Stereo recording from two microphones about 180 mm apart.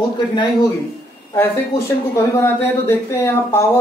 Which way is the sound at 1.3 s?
15° left (ahead or behind).